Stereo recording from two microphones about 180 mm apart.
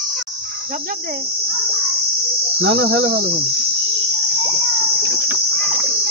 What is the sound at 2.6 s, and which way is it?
Cricket, 65° right (ahead or behind).